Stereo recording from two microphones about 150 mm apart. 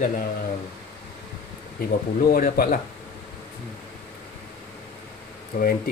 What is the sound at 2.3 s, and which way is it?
Speech, 75° left (ahead or behind).